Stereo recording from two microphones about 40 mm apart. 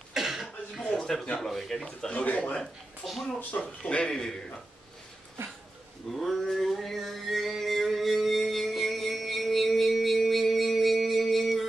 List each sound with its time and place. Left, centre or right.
0.1 s cough: centre
0.9 s a sound: centre
1.4 s a man's voice: centre
2.2 s speech: left
2.6 s a woman's voice: centre
3.3 s speech: left
4.1 s a man's voice: centre
6.1 s a sound: centre